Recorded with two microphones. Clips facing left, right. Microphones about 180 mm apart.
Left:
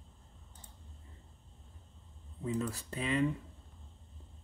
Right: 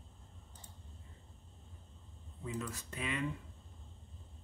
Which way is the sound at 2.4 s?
35° left (ahead or behind).